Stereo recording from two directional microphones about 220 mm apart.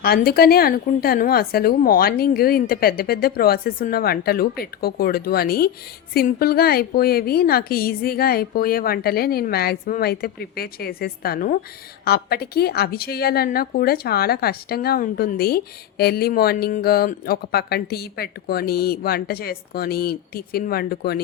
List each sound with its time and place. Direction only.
0.0 s a woman's voice: 45° left (ahead or behind)